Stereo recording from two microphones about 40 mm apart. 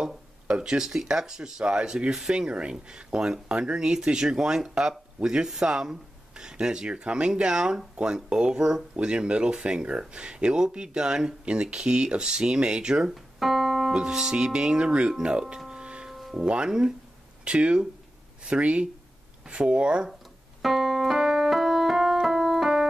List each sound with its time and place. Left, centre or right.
0.0 s a sound: right
0.8 s speech: centre
13.1 s keyboard: centre
13.9 s speech: centre
15.8 s music: right
16.1 s music: centre
16.3 s speech: right
20.6 s music: centre